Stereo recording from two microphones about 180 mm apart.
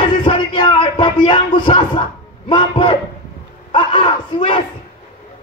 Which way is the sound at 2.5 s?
25° left (ahead or behind).